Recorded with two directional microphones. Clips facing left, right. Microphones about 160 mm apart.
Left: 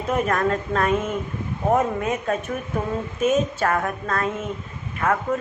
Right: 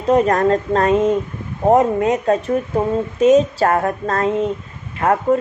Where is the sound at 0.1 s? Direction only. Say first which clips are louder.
Right 8 dB; 35° right (ahead or behind).